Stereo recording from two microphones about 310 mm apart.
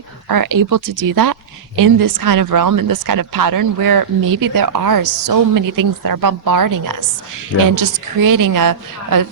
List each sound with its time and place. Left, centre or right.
0.3 s a woman's voice: right